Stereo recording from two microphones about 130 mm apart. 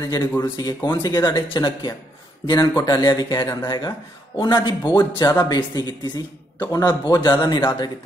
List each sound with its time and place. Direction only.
0.4 s a man's voice: 30° left (ahead or behind)